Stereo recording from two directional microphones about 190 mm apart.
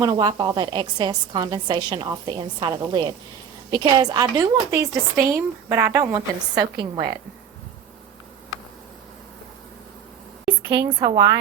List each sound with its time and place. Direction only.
0.0 s a woman's voice: 20° right (ahead or behind)
11.1 s a woman's voice: 25° right (ahead or behind)